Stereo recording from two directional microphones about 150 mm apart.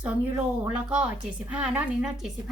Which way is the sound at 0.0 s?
10° right (ahead or behind).